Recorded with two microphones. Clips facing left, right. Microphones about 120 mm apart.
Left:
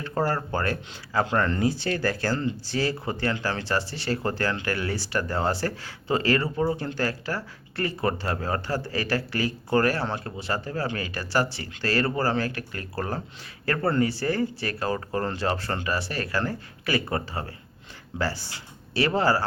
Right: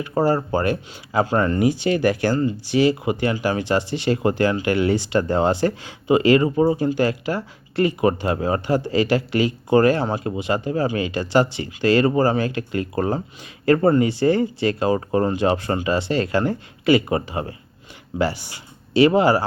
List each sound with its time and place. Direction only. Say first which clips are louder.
0.0 s speech: right 7 dB; 15° right (ahead or behind)